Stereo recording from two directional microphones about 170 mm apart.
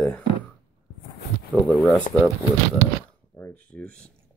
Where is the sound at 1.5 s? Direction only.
5° left (ahead or behind).